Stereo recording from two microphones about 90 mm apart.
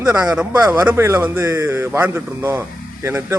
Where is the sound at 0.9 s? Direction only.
30° right (ahead or behind).